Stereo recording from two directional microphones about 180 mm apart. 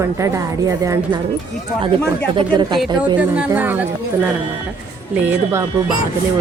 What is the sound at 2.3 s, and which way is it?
Speech, 25° right (ahead or behind).